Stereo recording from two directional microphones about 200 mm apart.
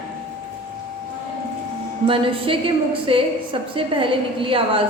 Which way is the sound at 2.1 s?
25° right (ahead or behind).